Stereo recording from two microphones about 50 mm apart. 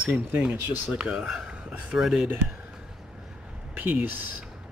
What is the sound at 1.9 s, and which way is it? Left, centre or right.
Speech, centre.